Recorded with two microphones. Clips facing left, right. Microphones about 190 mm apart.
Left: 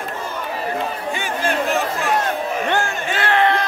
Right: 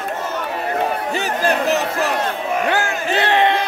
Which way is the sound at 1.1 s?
40° right (ahead or behind).